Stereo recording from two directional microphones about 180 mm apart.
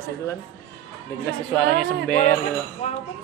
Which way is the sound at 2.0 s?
5° left (ahead or behind).